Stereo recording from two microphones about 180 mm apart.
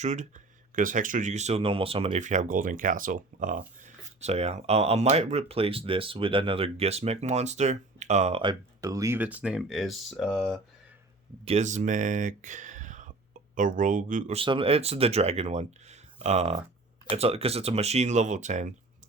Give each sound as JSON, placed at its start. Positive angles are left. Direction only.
{"t": 0.0, "sound": "speech", "side_deg": -40}
{"t": 11.4, "sound": "speech", "side_deg": -40}
{"t": 14.3, "sound": "speech", "side_deg": -30}